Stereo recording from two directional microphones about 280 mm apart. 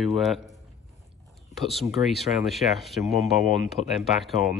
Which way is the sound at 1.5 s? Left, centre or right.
Centre.